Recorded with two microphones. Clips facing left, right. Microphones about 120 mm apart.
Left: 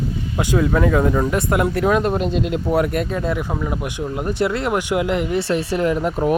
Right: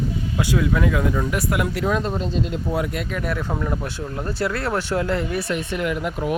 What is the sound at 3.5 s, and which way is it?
Speech, 10° left (ahead or behind).